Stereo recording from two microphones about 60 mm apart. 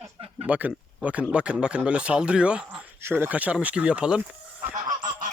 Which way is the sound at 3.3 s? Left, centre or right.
Right.